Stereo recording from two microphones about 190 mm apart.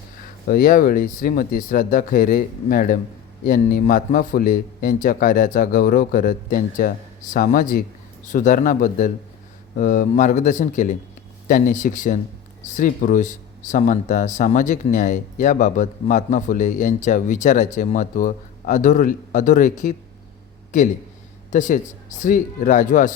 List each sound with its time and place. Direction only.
0.2 s speech: 50° left (ahead or behind)